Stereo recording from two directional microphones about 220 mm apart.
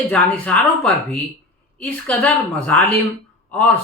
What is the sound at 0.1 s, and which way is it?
Speech, 5° left (ahead or behind).